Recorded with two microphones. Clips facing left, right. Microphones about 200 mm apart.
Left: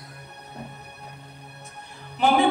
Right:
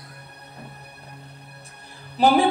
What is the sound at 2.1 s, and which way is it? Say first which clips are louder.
Music: right 2 dB; 35° right (ahead or behind).